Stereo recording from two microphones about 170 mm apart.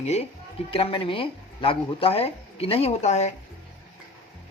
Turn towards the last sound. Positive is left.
turn(degrees=40)  # may be behind; listen again after turning